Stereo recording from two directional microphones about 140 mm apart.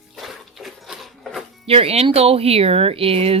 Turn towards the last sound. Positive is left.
turn(degrees=-45)  # may be behind; listen again after turning